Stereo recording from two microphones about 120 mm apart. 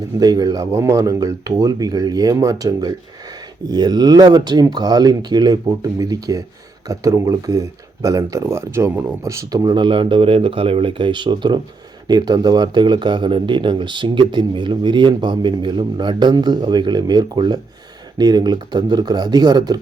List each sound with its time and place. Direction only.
0.2 s speech: 35° right (ahead or behind)